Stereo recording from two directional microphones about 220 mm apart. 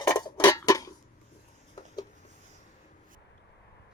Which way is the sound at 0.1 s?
15° left (ahead or behind).